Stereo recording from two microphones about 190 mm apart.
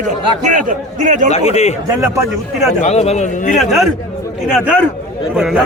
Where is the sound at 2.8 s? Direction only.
35° left (ahead or behind).